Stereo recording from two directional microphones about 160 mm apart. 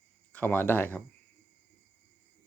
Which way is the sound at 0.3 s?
10° left (ahead or behind).